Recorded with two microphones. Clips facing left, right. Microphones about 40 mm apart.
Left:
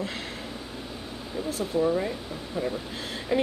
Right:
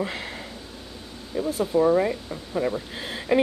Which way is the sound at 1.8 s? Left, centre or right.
Right.